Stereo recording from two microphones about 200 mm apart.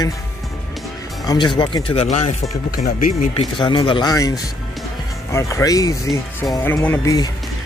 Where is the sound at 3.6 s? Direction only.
25° left (ahead or behind).